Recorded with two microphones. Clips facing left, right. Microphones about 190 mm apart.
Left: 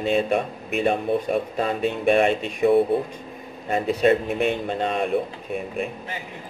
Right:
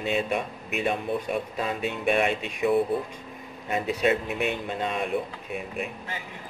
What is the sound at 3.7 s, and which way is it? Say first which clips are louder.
Speech: left 5 dB; 45° left (ahead or behind).